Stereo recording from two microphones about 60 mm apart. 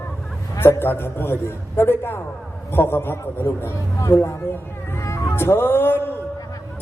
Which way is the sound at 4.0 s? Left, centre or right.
Left.